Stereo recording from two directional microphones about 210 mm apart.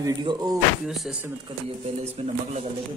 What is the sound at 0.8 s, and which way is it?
Speech, centre (ahead or behind).